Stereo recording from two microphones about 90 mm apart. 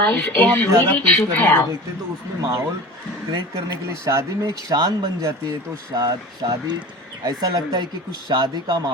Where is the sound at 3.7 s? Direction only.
35° right (ahead or behind).